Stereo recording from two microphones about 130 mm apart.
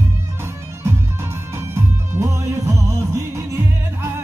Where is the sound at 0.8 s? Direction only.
20° right (ahead or behind).